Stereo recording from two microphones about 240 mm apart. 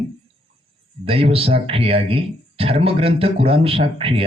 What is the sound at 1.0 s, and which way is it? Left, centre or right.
Speech, right.